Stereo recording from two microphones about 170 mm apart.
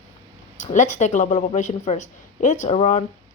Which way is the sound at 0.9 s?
45° left (ahead or behind).